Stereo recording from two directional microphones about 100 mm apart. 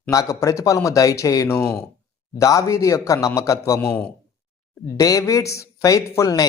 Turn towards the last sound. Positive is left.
turn(degrees=35)  # may be behind; listen again after turning